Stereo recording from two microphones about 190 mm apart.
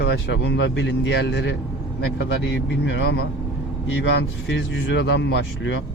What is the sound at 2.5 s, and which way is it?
Speech, 80° left.